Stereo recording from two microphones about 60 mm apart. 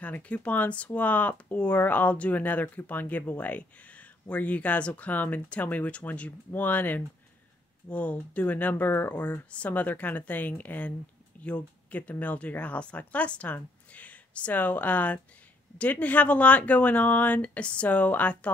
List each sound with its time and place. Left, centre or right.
0.0 s speech: left